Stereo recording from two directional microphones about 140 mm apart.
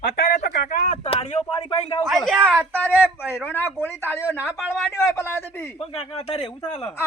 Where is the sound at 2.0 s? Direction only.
Centre (ahead or behind).